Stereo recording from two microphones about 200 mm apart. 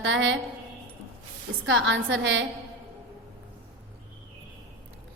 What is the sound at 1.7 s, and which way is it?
Speech, 70° right (ahead or behind).